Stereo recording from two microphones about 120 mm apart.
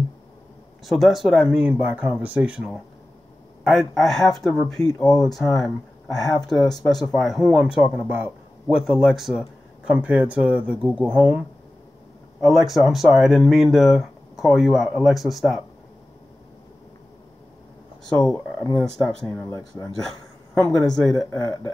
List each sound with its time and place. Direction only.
0.8 s speech: centre (ahead or behind); by 8.3 s 15° right (ahead or behind)
8.6 s speech: 5° right (ahead or behind)
18.2 s speech: 30° left (ahead or behind)
20.7 s speech: 5° left (ahead or behind)